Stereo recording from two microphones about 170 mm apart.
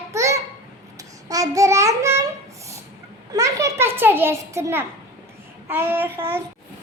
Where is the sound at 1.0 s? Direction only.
20° right (ahead or behind).